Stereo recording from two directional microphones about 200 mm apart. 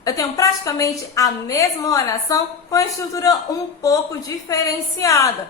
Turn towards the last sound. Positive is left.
turn(degrees=15)  # may be behind; listen again after turning